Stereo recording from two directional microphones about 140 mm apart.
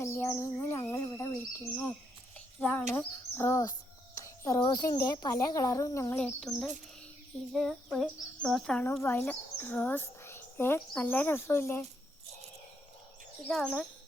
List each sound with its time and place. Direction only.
0.0 s bird: 20° left (ahead or behind)
2.6 s a sound: 10° left (ahead or behind)
4.2 s a child's voice: 25° left (ahead or behind)
6.5 s speech: 5° left (ahead or behind)
13.5 s speech: centre (ahead or behind)